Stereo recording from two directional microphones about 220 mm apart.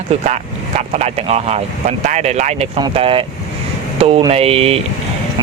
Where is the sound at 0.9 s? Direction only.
30° right (ahead or behind).